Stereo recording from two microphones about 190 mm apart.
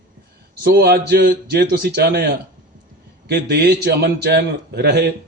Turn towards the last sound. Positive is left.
turn(degrees=-60)  # may be behind; listen again after turning